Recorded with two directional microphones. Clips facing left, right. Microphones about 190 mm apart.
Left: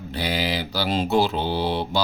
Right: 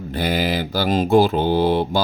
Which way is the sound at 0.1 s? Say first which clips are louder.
Right 4 dB; 50° right (ahead or behind).